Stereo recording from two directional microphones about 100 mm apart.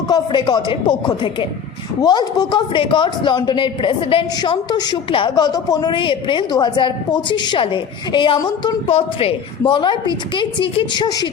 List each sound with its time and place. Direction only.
0.1 s a woman's voice: 45° left (ahead or behind)
2.0 s a woman's voice: 45° left (ahead or behind); by 4.3 s 60° left (ahead or behind)
4.4 s a woman's voice: 45° left (ahead or behind)
5.9 s a woman's voice: 55° left (ahead or behind)
8.9 s a woman's voice: 75° left (ahead or behind); by 11.3 s 45° left (ahead or behind)